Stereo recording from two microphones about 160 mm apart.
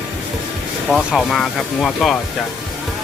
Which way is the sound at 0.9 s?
Centre (ahead or behind).